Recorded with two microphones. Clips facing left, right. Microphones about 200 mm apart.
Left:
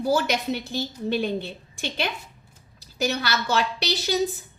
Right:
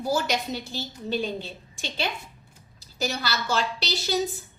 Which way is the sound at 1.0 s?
60° left (ahead or behind).